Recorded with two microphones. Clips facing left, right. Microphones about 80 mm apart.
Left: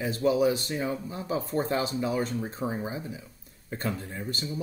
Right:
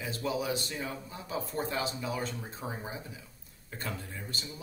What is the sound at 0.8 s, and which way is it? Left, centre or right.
Speech, left.